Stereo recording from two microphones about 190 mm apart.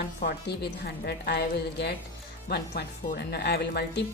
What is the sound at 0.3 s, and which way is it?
Speech, 60° left (ahead or behind).